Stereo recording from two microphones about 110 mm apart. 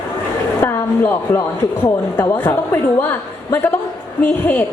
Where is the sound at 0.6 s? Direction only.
20° left (ahead or behind).